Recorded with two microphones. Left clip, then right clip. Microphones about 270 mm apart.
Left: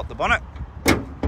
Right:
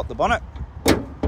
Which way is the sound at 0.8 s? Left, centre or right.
Centre.